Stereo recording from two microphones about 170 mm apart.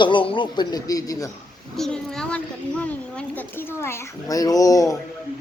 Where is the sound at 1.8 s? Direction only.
5° left (ahead or behind); by 4.9 s 20° left (ahead or behind).